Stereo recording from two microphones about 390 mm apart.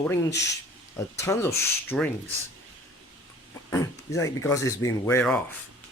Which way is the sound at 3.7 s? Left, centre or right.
Centre.